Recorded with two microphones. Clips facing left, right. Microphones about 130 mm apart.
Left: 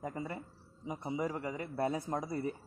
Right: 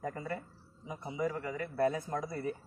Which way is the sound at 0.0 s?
20° left (ahead or behind).